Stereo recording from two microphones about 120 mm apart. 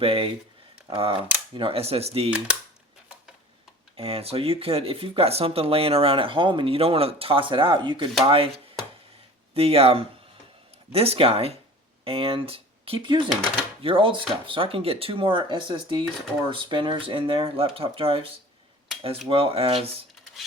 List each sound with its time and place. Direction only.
0.0 s speech: 50° right (ahead or behind)
3.9 s speech: 55° right (ahead or behind)
8.3 s a sound: 50° right (ahead or behind)
9.6 s speech: 55° right (ahead or behind)
13.3 s speech: 5° left (ahead or behind)
13.8 s speech: 45° right (ahead or behind)
19.3 s speech: 50° right (ahead or behind)